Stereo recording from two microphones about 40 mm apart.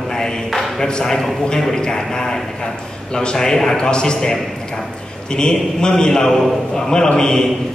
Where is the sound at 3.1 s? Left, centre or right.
Centre.